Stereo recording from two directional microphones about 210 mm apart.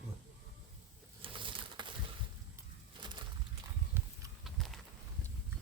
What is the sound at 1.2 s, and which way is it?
Pigeon, 25° right (ahead or behind).